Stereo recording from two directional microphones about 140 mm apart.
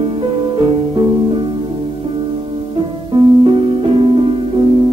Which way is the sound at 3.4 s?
40° right (ahead or behind).